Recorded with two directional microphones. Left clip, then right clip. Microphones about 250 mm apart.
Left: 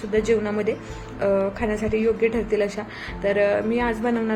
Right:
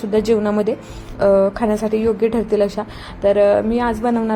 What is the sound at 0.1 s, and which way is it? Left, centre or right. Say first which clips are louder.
A woman's voice: right 5 dB; right.